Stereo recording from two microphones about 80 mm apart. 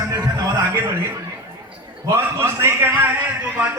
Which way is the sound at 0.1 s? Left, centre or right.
Right.